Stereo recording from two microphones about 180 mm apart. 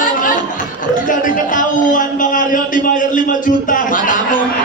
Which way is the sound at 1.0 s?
45° left (ahead or behind).